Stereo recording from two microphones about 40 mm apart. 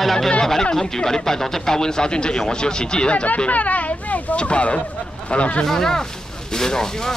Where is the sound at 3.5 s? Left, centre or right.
Left.